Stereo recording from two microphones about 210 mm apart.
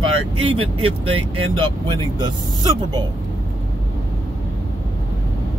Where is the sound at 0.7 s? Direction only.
90° right.